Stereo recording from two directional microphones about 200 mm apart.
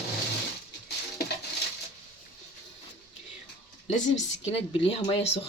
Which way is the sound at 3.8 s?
35° left (ahead or behind).